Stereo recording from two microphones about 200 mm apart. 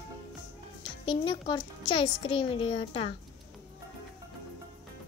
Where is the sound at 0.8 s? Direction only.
25° left (ahead or behind).